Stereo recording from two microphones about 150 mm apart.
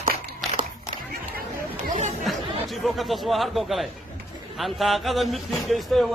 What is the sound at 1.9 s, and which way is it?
Chatter, 55° right (ahead or behind).